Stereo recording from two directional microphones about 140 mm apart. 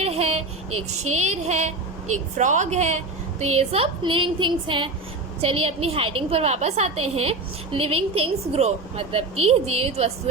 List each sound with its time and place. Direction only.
0.0 s a sound: 50° right (ahead or behind)
1.1 s a woman's voice: 55° right (ahead or behind)
4.0 s a woman's voice: 35° right (ahead or behind)